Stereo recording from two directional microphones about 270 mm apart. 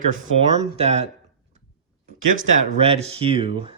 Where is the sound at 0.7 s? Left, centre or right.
Right.